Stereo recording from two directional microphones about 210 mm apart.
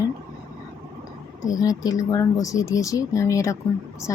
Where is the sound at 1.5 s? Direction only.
15° left (ahead or behind).